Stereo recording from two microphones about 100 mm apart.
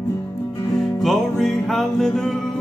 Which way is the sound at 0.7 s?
5° left (ahead or behind).